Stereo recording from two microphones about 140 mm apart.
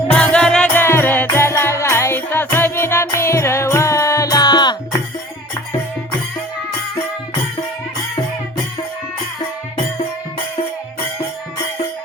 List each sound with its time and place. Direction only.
0.1 s music: 5° left (ahead or behind); by 4.9 s 30° left (ahead or behind)